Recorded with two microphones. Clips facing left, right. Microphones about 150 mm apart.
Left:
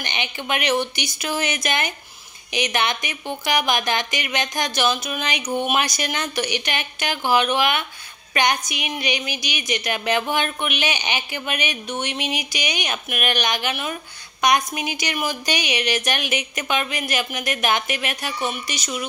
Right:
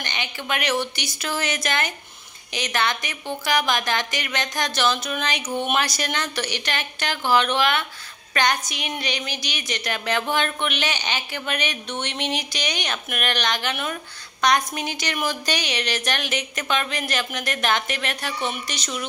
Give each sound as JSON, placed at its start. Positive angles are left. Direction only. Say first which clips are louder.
{"t": 0.0, "sound": "a woman's voice", "louder": "left 2 dB", "side_deg": 20}